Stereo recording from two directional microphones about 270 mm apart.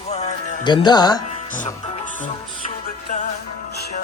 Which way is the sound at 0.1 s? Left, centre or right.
Left.